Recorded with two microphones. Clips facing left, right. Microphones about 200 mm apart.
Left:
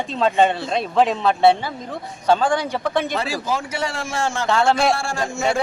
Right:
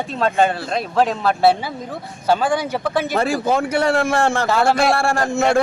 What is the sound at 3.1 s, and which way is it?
A man's voice, 55° right (ahead or behind).